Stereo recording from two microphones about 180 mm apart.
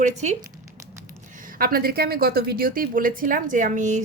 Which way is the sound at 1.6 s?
55° right (ahead or behind).